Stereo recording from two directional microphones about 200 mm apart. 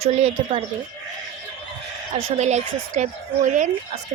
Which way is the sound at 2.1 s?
30° right (ahead or behind).